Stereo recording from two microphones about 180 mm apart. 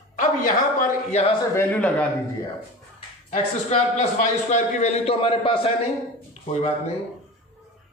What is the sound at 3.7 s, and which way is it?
A man's voice, 40° left (ahead or behind).